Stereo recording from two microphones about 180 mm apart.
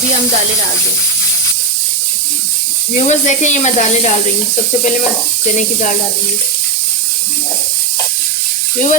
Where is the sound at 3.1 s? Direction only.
40° left (ahead or behind).